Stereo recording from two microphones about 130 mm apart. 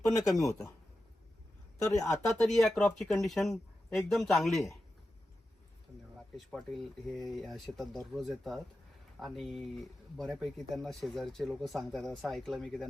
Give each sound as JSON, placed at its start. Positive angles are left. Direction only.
{"t": 1.9, "sound": "speech", "side_deg": 25}
{"t": 2.2, "sound": "speech", "side_deg": 5}
{"t": 6.3, "sound": "speech", "side_deg": 0}